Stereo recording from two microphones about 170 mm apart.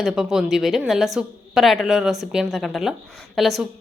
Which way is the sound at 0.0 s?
Centre (ahead or behind).